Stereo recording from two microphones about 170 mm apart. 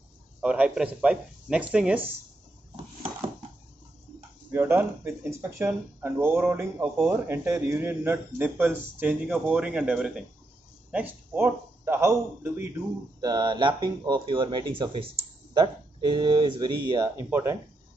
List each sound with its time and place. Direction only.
0.4 s a man's voice: 5° right (ahead or behind)
4.5 s a man's voice: 15° right (ahead or behind)
17.2 s a man's voice: 15° right (ahead or behind)